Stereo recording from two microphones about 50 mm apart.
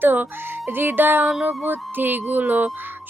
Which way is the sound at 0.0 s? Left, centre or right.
Right.